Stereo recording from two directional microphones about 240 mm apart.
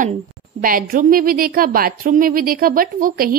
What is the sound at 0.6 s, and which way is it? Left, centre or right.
A woman's voice, right.